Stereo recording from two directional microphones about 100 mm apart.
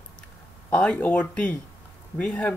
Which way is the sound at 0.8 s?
10° left (ahead or behind).